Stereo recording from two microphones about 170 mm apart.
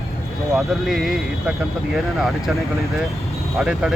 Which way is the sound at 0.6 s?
Centre (ahead or behind).